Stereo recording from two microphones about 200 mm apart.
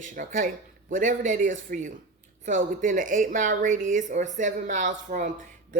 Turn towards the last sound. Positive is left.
turn(degrees=-40)  # may be behind; listen again after turning